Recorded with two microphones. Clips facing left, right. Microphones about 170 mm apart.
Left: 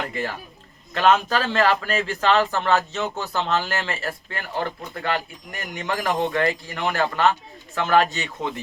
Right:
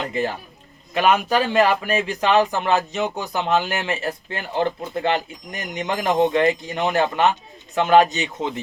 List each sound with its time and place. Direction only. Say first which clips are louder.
0.0 s a man's voice: right 4 dB; 20° right (ahead or behind)